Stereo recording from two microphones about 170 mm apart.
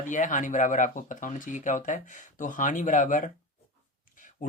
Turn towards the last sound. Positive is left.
turn(degrees=50)  # may be behind; listen again after turning